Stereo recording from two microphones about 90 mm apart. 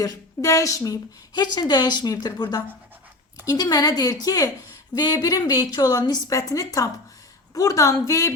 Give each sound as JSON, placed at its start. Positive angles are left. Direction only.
{"t": 0.0, "sound": "a woman's voice", "side_deg": 40}
{"t": 1.3, "sound": "a woman's voice", "side_deg": 50}